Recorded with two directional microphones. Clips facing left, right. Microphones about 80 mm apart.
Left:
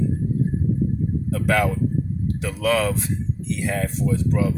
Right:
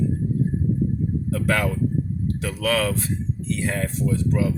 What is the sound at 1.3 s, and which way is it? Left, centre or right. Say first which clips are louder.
Speech: left 3 dB; centre.